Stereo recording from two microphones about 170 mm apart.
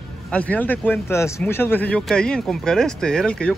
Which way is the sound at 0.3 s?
10° left (ahead or behind).